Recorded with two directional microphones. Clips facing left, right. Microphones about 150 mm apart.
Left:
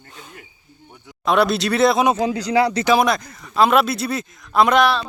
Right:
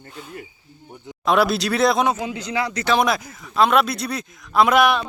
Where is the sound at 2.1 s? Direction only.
35° left (ahead or behind).